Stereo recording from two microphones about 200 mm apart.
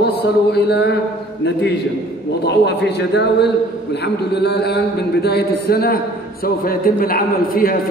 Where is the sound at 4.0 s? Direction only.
55° left (ahead or behind).